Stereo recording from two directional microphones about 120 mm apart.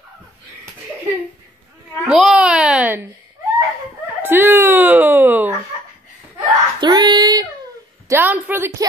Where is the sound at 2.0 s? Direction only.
5° right (ahead or behind).